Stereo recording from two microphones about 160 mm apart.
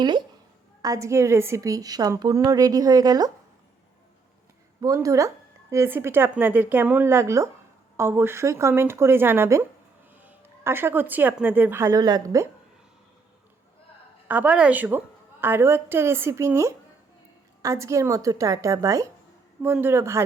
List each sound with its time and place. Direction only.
0.0 s a woman's voice: 25° right (ahead or behind)
4.8 s a woman's voice: 20° right (ahead or behind)
11.9 s a woman's voice: 25° right (ahead or behind)
14.3 s a woman's voice: 10° right (ahead or behind)